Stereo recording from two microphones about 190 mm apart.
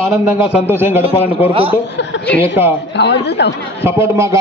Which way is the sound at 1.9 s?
65° left (ahead or behind).